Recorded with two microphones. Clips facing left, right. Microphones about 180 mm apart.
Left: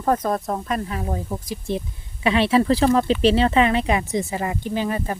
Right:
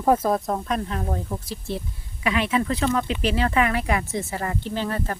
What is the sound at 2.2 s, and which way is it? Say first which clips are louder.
Speech: left 5 dB; 30° left (ahead or behind).